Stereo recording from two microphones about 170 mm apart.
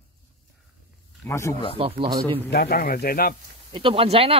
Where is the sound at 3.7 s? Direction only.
30° right (ahead or behind).